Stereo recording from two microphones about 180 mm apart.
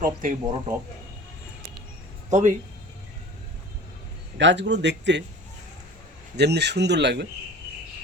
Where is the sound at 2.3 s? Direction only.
45° right (ahead or behind).